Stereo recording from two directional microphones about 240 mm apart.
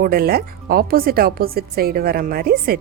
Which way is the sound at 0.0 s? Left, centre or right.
Right.